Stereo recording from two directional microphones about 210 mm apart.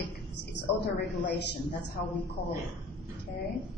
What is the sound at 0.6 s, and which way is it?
A woman's voice, 55° left (ahead or behind).